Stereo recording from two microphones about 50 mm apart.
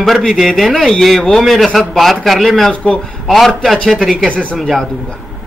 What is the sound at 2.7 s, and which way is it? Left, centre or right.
Speech, left.